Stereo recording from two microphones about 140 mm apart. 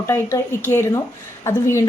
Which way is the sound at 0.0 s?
20° left (ahead or behind).